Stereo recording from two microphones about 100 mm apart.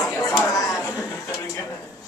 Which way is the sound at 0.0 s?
35° left (ahead or behind).